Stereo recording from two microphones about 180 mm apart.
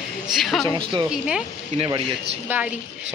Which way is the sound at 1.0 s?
5° right (ahead or behind).